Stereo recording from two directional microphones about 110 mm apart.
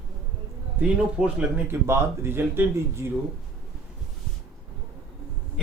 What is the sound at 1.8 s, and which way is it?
A man's voice, 20° right (ahead or behind).